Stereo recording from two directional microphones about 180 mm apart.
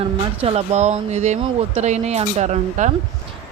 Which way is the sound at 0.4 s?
40° right (ahead or behind).